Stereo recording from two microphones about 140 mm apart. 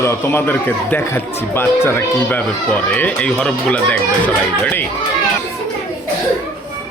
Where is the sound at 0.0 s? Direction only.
20° left (ahead or behind).